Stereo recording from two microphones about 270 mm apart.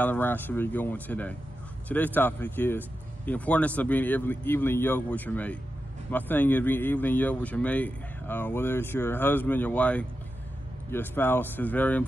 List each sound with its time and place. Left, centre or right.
0.0 s speech: centre